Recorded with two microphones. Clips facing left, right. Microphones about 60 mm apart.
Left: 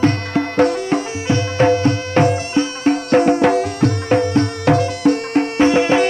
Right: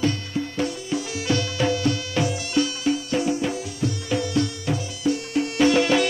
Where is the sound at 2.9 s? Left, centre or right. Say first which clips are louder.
Left 9 dB; left.